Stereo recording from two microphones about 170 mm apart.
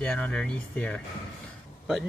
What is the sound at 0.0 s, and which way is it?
Speech, 5° left (ahead or behind).